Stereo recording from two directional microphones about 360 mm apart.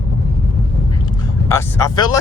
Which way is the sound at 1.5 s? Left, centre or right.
Centre.